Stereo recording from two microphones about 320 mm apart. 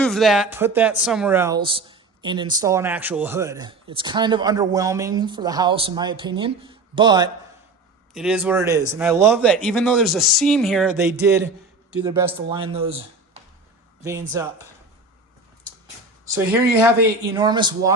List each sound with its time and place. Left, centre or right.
0.0 s speech: centre
8.1 s speech: centre
16.2 s speech: centre